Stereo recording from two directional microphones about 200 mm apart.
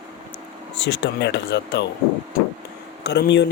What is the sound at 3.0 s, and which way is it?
Speech, 55° left (ahead or behind).